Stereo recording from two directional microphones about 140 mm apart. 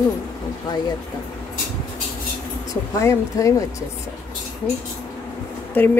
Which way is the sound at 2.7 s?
20° left (ahead or behind).